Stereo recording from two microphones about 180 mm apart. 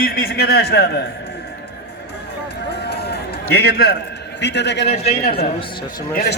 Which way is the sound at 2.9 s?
65° left (ahead or behind).